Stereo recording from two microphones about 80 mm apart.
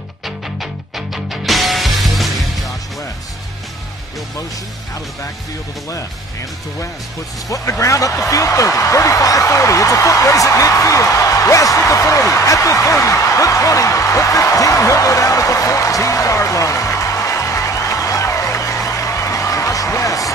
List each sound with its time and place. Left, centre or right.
0.6 s music: centre
7.4 s speech: left
18.9 s music: left